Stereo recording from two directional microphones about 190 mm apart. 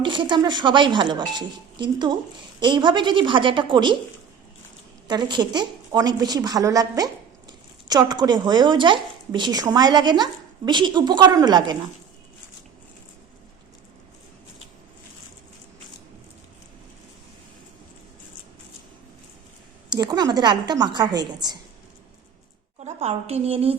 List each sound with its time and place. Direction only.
0.0 s a woman's voice: 25° right (ahead or behind)
5.0 s a woman's voice: 25° right (ahead or behind)
19.9 s a woman's voice: 20° right (ahead or behind)
22.8 s a woman's voice: 35° right (ahead or behind)